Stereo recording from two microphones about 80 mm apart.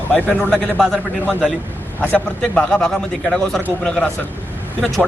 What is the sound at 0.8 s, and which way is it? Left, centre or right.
A man's voice, centre.